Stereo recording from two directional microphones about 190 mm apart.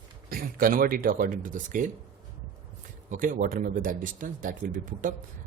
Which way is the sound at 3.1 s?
45° right (ahead or behind).